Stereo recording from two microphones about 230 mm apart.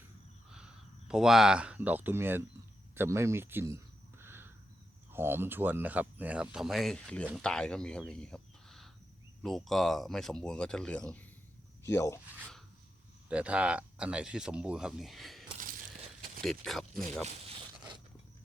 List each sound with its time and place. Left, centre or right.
0.5 s speech: centre
4.2 s a sound: centre
5.1 s speech: centre
12.4 s plop: centre
13.3 s speech: centre